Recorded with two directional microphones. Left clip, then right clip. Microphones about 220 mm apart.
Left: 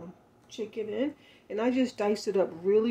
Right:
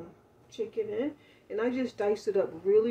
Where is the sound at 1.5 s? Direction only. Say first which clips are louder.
Left 2 dB; 35° left (ahead or behind).